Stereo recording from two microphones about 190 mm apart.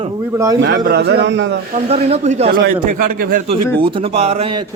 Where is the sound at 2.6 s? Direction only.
50° right (ahead or behind).